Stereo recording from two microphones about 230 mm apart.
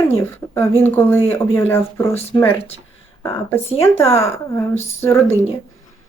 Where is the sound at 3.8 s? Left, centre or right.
Centre.